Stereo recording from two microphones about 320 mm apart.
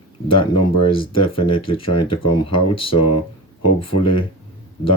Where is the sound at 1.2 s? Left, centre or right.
Centre.